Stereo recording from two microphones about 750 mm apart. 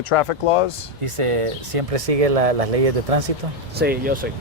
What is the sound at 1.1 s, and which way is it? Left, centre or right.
Speech, right.